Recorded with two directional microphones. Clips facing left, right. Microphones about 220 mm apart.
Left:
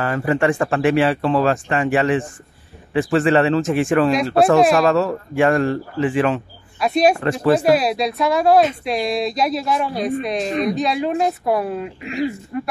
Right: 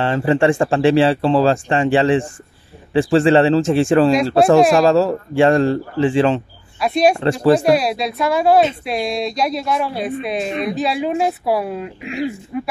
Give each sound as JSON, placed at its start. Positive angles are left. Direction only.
{"t": 0.0, "sound": "speech", "side_deg": -25}
{"t": 6.8, "sound": "speech", "side_deg": 0}